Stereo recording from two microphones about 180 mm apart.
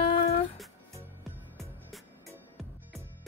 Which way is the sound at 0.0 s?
35° left (ahead or behind).